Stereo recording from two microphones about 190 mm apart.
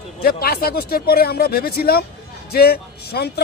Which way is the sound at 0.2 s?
55° left (ahead or behind).